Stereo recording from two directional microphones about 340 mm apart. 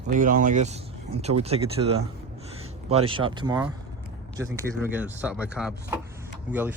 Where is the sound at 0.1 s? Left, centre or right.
Right.